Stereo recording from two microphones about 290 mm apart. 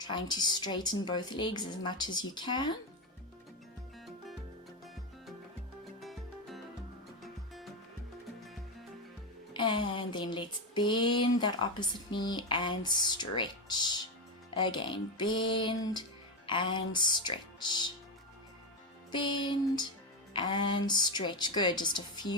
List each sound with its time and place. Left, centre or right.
0.0 s a woman's voice: centre
6.0 s music: centre
9.5 s a sound: centre
14.5 s a woman's voice: centre
19.1 s a woman's voice: centre